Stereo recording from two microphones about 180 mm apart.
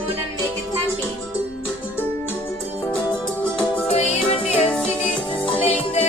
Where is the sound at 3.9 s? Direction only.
35° left (ahead or behind).